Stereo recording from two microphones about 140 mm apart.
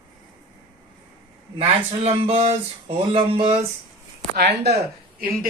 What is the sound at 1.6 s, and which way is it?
Speech, 45° right (ahead or behind).